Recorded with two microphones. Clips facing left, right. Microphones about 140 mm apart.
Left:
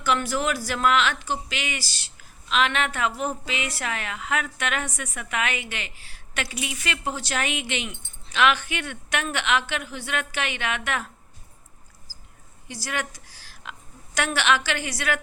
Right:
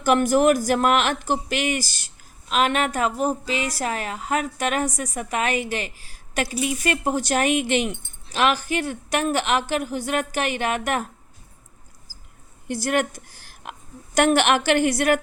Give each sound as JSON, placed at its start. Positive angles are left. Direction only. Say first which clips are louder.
{"t": 0.0, "sound": "a woman's voice", "louder": "right 7 dB", "side_deg": -45}
{"t": 12.6, "sound": "a woman's voice", "louder": "right 9 dB", "side_deg": -55}